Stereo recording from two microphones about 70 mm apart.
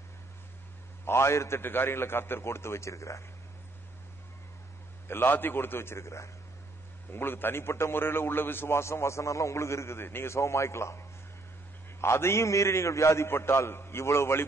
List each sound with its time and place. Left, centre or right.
1.0 s a man's voice: left
5.0 s a man's voice: left
7.1 s a man's voice: left